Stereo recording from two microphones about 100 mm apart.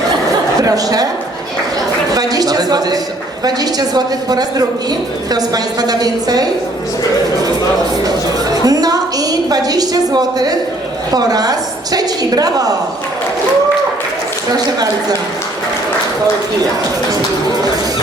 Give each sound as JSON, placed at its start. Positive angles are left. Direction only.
{"t": 0.6, "sound": "speech", "side_deg": -35}
{"t": 2.1, "sound": "a woman's voice", "side_deg": -40}
{"t": 8.6, "sound": "a woman's voice", "side_deg": -40}
{"t": 14.5, "sound": "a woman's voice", "side_deg": -40}